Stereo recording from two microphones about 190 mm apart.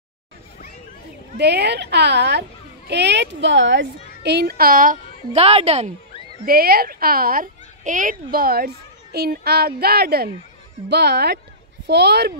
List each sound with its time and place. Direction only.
1.4 s a woman's voice: 60° right (ahead or behind)
4.2 s speech: 60° right (ahead or behind); by 5.9 s 35° right (ahead or behind)
6.4 s a woman's voice: 50° right (ahead or behind)